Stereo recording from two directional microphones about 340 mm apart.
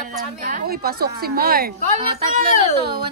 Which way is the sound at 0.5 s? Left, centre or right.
Right.